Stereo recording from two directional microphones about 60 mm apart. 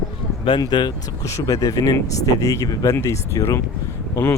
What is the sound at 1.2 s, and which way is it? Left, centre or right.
Speech, left.